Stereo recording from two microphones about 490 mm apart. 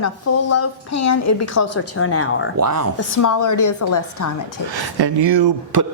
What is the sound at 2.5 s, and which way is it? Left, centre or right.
Speech, right.